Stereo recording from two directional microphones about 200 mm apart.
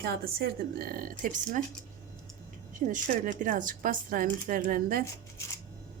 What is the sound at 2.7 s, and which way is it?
Speech, 40° right (ahead or behind).